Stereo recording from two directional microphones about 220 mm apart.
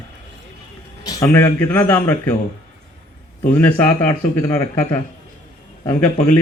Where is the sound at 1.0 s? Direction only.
15° left (ahead or behind).